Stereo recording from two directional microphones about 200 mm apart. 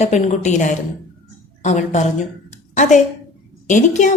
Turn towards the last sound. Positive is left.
turn(degrees=35)  # may be behind; listen again after turning